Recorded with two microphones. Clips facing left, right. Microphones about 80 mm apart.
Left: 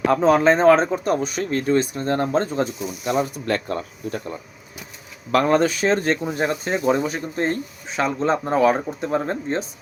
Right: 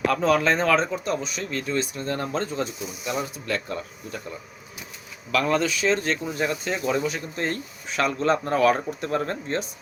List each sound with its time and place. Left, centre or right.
0.1 s speech: left